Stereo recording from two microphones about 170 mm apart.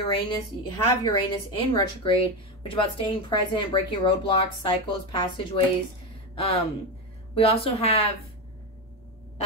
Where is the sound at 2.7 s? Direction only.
30° left (ahead or behind).